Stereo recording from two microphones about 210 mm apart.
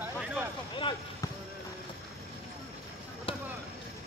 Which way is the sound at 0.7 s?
25° left (ahead or behind).